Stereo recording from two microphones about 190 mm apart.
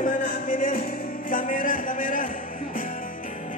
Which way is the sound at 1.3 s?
45° left (ahead or behind).